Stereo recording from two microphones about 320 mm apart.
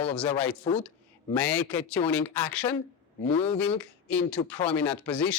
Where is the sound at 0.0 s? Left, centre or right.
Centre.